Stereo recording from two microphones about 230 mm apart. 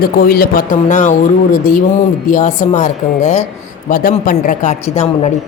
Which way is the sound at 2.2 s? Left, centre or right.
Left.